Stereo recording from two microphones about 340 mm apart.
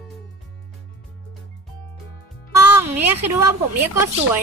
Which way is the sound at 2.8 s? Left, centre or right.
Centre.